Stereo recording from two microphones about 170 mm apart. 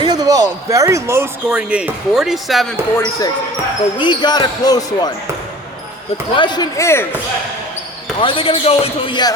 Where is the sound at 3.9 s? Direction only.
25° left (ahead or behind).